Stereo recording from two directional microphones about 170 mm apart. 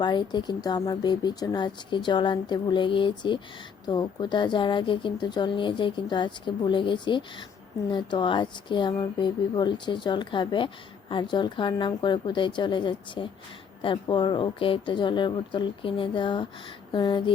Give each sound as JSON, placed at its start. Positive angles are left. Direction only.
{"t": 0.0, "sound": "speech", "side_deg": 25}